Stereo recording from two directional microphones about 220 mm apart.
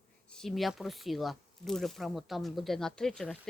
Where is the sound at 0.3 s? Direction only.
Centre (ahead or behind).